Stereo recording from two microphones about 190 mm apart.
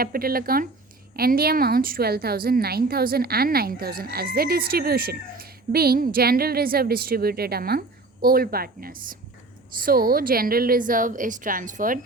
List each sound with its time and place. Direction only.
0.0 s a woman's voice: 50° right (ahead or behind)